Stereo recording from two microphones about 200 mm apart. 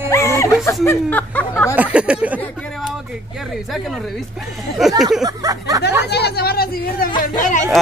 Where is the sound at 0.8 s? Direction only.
10° left (ahead or behind).